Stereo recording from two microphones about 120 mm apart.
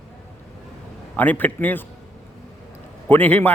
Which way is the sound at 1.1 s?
15° left (ahead or behind).